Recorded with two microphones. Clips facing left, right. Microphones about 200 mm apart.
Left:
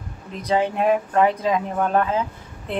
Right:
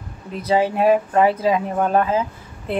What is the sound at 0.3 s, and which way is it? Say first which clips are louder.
Speech: right 3 dB; 5° right (ahead or behind).